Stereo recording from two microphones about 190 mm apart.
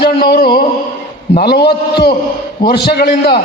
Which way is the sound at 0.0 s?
55° left (ahead or behind).